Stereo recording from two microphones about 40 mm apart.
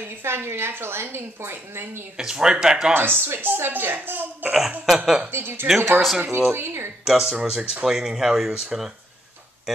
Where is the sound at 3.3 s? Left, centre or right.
Right.